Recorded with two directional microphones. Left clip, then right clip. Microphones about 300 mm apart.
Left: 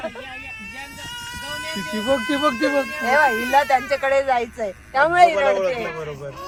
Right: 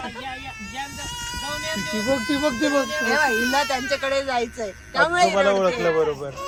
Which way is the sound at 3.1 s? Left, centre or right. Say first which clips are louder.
Left 5 dB; left.